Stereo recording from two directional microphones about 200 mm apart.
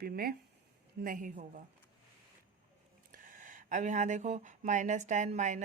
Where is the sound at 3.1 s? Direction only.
40° right (ahead or behind).